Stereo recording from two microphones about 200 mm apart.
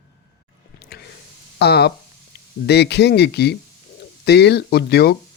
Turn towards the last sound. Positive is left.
turn(degrees=50)  # may be behind; listen again after turning